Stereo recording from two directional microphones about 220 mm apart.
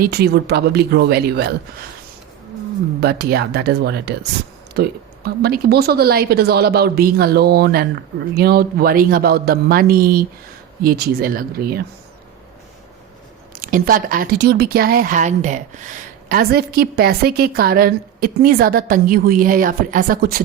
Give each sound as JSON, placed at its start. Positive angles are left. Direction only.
{"t": 0.0, "sound": "a woman's voice", "side_deg": -45}
{"t": 3.0, "sound": "a woman's voice", "side_deg": -45}
{"t": 13.6, "sound": "speech", "side_deg": -40}